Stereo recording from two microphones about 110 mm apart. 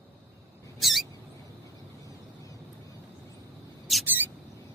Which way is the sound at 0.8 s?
Centre (ahead or behind).